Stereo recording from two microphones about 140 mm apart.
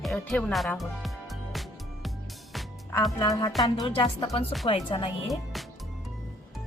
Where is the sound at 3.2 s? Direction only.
25° left (ahead or behind).